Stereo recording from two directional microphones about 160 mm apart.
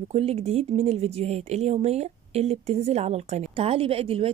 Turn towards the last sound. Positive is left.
turn(degrees=-35)  # may be behind; listen again after turning